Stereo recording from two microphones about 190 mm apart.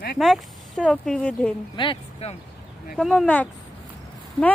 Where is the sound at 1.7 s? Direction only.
25° left (ahead or behind).